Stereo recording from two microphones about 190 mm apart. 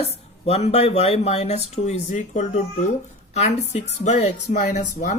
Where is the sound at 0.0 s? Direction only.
30° left (ahead or behind).